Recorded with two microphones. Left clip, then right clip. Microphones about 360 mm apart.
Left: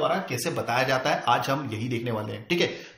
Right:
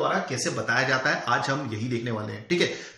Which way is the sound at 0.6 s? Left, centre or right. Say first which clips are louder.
Right 1 dB; centre.